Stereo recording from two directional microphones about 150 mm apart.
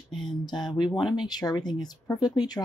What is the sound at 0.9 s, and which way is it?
Speech, 5° right (ahead or behind).